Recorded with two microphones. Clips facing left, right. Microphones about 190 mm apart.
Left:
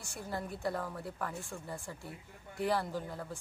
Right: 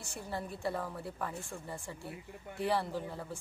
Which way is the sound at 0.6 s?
10° right (ahead or behind).